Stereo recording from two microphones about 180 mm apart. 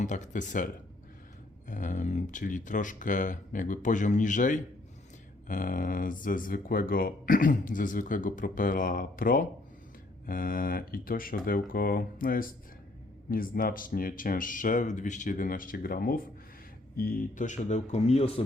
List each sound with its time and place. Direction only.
0.0 s speech: 45° left (ahead or behind)